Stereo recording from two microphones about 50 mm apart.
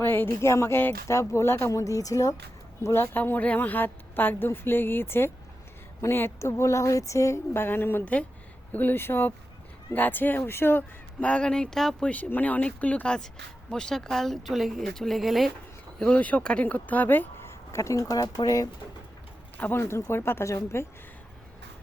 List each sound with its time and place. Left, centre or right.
0.0 s speech: left
2.8 s speech: left
3.2 s speech: left
6.4 s speech: left
7.5 s speech: left
11.2 s speech: left
11.4 s speech: centre
12.3 s speech: left
13.1 s speech: centre
16.1 s speech: left
17.4 s a sound: left
19.8 s speech: left